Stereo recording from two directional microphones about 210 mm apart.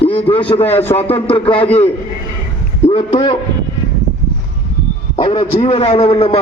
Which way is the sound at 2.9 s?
25° left (ahead or behind).